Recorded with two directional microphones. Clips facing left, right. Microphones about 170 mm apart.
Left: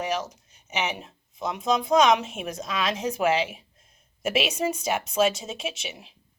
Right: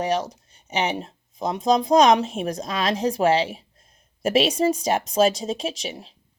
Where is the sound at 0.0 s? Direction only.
35° right (ahead or behind).